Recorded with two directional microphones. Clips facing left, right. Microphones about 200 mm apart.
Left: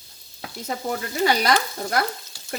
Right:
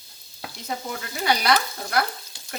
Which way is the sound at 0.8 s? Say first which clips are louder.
Left 4 dB; 45° left (ahead or behind).